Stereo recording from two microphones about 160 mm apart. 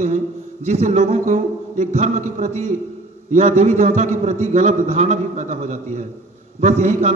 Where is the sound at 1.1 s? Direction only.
50° right (ahead or behind).